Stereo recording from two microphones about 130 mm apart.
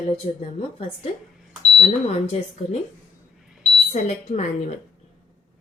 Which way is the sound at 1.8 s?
55° left (ahead or behind).